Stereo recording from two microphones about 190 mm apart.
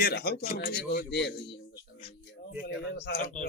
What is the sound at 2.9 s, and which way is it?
Speech, 50° left (ahead or behind).